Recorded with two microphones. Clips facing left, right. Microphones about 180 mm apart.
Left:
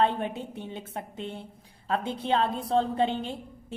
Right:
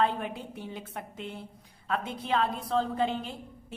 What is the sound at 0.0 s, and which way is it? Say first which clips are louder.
A woman's voice: left 3 dB; 25° left (ahead or behind).